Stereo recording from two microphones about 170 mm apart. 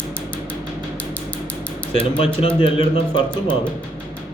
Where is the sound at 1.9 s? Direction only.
30° left (ahead or behind).